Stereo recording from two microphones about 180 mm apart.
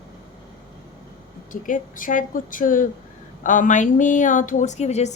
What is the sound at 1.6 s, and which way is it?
A woman's voice, 45° left (ahead or behind).